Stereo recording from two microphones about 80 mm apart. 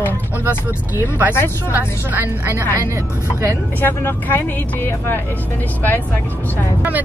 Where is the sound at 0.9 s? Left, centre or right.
Right.